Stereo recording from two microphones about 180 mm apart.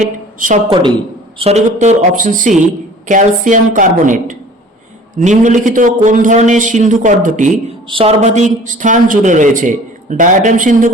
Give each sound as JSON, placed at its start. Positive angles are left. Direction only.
{"t": 0.0, "sound": "a woman's voice", "side_deg": -45}
{"t": 0.7, "sound": "speech", "side_deg": -30}
{"t": 7.9, "sound": "speech", "side_deg": -30}